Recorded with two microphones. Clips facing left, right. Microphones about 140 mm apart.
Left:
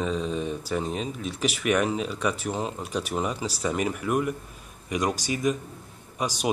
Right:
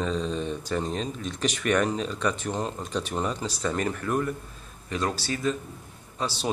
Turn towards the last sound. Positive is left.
turn(degrees=15)  # may be behind; listen again after turning